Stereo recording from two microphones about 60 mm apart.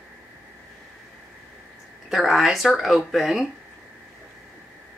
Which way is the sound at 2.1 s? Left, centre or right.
Centre.